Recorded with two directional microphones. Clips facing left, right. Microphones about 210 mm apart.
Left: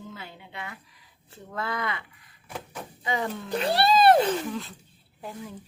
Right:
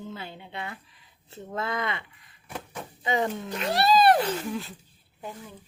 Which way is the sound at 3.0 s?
25° right (ahead or behind).